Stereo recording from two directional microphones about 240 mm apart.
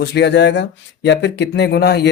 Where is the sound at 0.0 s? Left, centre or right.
Left.